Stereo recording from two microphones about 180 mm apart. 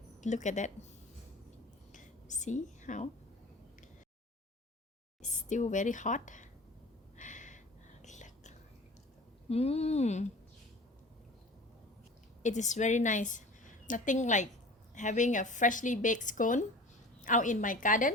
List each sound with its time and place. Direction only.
0.2 s a woman's voice: 40° left (ahead or behind)
1.9 s whispering: 45° left (ahead or behind)
5.2 s a woman's voice: 40° left (ahead or behind)
7.2 s gasp: 45° left (ahead or behind)
8.0 s a sound: 40° left (ahead or behind)
9.5 s speech: 35° left (ahead or behind)
12.4 s a woman's voice: 40° left (ahead or behind)